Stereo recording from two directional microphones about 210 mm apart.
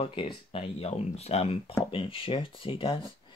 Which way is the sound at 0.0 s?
25° left (ahead or behind).